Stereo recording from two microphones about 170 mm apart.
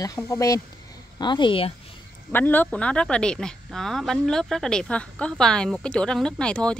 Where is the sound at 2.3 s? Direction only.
10° left (ahead or behind).